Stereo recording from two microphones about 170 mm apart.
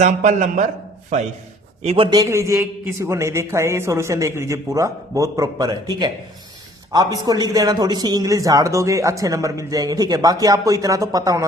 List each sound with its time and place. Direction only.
0.0 s a man's voice: 45° right (ahead or behind)
1.8 s a man's voice: 40° right (ahead or behind)
2.0 s a man's voice: 20° right (ahead or behind)